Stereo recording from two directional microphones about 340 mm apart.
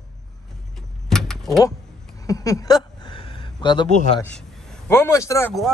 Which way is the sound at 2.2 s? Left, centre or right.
Centre.